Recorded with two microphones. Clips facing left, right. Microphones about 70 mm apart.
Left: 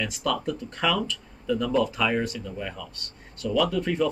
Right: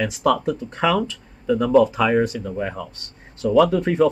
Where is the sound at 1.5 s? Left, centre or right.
Right.